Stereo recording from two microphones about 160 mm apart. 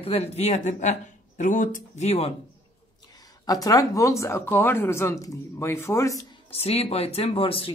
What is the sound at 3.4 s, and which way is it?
Speech, 20° left (ahead or behind).